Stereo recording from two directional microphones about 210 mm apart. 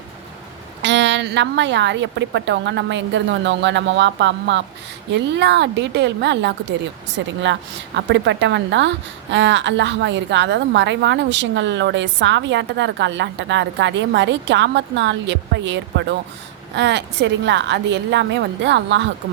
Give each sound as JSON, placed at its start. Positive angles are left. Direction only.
{"t": 0.8, "sound": "a woman's voice", "side_deg": -60}
{"t": 7.9, "sound": "a woman's voice", "side_deg": -55}